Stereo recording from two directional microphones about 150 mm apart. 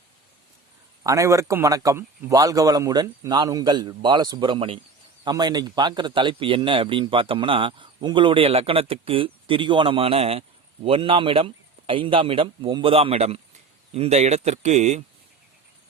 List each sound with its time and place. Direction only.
1.0 s a man's voice: 20° right (ahead or behind); by 15.0 s 50° right (ahead or behind)